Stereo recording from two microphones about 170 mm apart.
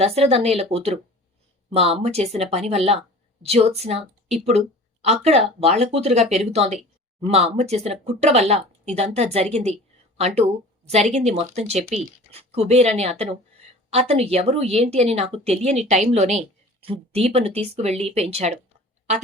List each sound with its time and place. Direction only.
0.0 s a woman's voice: 35° right (ahead or behind)